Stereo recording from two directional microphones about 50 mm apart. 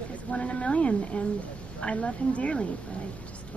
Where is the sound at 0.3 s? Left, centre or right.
Left.